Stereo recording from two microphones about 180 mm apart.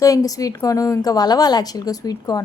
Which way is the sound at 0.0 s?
20° left (ahead or behind).